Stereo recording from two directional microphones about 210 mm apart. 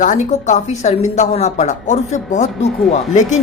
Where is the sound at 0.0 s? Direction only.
35° left (ahead or behind).